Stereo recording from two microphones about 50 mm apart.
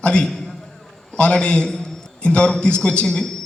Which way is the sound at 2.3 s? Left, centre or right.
Centre.